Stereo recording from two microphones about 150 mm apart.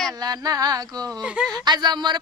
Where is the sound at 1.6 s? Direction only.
30° right (ahead or behind).